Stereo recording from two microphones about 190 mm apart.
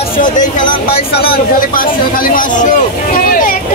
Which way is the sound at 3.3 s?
50° left (ahead or behind).